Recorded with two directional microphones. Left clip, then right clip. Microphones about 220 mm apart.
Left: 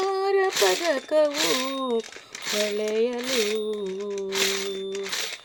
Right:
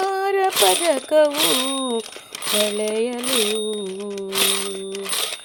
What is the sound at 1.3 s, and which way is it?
Speech, 35° right (ahead or behind).